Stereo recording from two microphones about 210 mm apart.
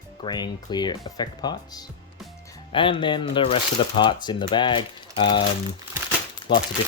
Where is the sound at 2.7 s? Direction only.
25° left (ahead or behind).